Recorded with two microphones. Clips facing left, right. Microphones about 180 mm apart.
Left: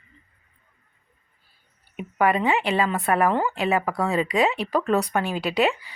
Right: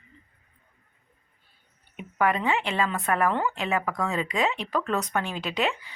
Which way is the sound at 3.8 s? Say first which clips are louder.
Left 4 dB; 35° left (ahead or behind).